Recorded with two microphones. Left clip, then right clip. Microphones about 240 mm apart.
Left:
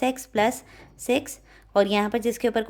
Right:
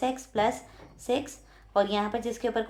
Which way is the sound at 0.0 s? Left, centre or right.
Left.